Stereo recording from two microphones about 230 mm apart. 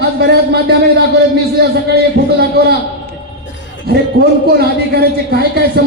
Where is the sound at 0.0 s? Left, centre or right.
Right.